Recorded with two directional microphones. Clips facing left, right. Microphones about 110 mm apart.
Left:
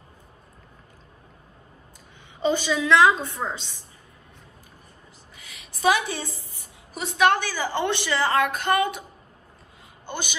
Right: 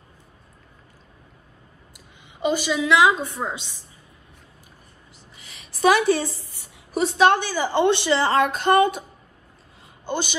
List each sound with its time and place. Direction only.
2.0 s a woman's voice: 15° right (ahead or behind)
5.8 s a woman's voice: 50° right (ahead or behind)
7.2 s a woman's voice: 20° right (ahead or behind)